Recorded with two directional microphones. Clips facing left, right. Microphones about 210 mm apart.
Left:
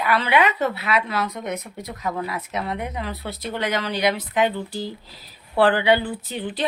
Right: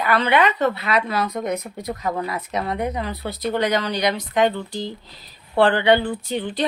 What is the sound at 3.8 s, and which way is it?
A woman's voice, 5° left (ahead or behind).